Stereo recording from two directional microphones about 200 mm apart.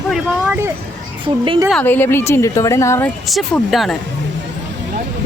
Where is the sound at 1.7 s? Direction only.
10° left (ahead or behind).